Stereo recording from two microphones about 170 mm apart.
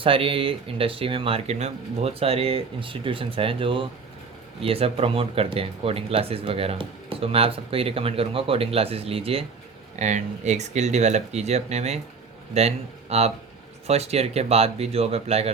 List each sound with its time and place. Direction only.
0.0 s speech: 30° right (ahead or behind)